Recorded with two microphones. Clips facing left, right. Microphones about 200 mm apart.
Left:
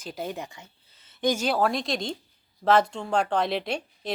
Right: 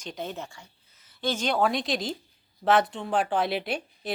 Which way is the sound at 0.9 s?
25° left (ahead or behind).